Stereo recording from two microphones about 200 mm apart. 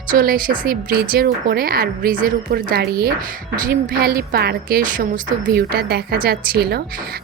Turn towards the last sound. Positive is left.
turn(degrees=-50)  # may be behind; listen again after turning